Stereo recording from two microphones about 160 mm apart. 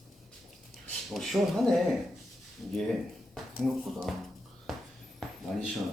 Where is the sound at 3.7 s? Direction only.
Centre (ahead or behind).